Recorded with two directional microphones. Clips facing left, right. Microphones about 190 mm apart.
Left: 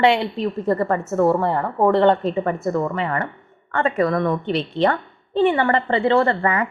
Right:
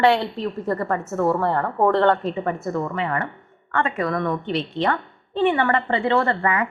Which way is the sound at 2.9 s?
35° left (ahead or behind).